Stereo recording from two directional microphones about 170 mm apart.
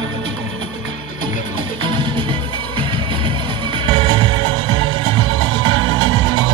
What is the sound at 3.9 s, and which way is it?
Music, 30° right (ahead or behind).